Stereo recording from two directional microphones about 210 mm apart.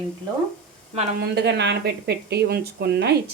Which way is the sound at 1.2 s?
50° right (ahead or behind).